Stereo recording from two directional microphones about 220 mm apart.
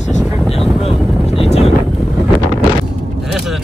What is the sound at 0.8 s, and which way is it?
Vehicle, 30° left (ahead or behind).